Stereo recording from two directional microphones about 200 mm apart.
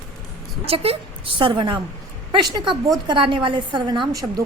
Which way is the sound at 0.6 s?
30° right (ahead or behind).